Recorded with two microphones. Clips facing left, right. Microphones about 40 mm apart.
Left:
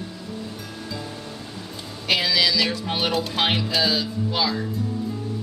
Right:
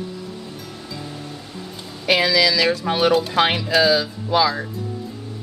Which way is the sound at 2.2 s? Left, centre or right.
Right.